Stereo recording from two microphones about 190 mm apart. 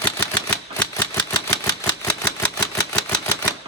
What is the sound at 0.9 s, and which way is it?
Camera, 15° left (ahead or behind).